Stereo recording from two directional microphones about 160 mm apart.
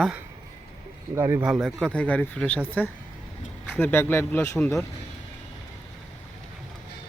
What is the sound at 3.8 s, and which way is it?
Speech, 15° left (ahead or behind).